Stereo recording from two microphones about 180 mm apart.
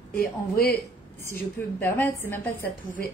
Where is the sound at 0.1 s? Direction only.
55° left (ahead or behind).